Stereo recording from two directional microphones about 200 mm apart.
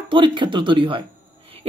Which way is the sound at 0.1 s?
25° right (ahead or behind).